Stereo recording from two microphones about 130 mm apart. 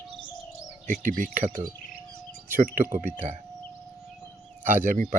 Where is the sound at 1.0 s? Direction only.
85° right.